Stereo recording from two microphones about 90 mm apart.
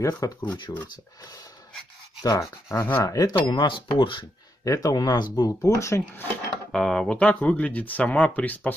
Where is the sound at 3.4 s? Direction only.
65° left (ahead or behind).